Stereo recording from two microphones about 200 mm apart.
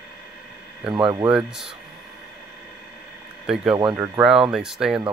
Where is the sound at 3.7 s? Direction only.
20° right (ahead or behind).